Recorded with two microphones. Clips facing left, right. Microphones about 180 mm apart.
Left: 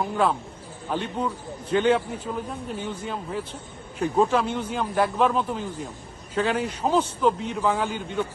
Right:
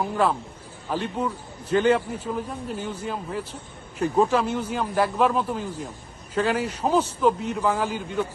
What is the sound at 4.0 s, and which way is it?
A man's voice, centre (ahead or behind).